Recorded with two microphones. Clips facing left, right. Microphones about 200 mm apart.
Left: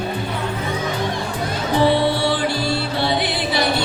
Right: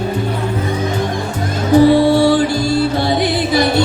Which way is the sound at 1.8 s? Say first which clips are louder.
Right 8 dB; 45° right (ahead or behind).